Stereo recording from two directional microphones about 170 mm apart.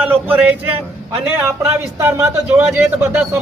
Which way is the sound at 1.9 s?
15° right (ahead or behind).